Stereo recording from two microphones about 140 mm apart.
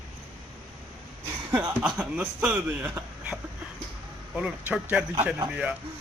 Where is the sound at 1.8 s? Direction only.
5° right (ahead or behind).